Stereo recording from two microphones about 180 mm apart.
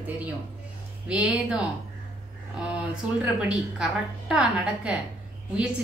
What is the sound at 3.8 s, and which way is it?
A woman's voice, 5° right (ahead or behind).